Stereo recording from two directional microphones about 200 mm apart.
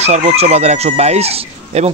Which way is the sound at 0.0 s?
35° right (ahead or behind).